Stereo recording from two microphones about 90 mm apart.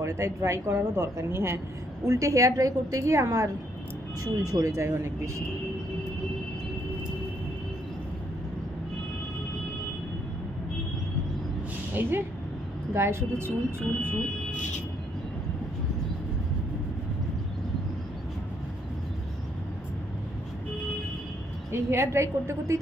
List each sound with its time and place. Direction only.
0.0 s speech: 35° right (ahead or behind)
11.9 s a woman's voice: 20° right (ahead or behind)
21.7 s speech: 30° right (ahead or behind)